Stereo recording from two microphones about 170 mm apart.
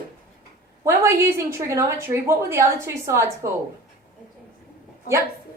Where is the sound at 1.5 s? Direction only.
15° right (ahead or behind).